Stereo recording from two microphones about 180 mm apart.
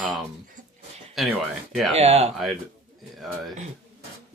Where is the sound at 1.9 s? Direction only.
35° right (ahead or behind).